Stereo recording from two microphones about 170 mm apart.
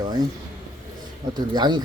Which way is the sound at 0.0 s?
25° right (ahead or behind).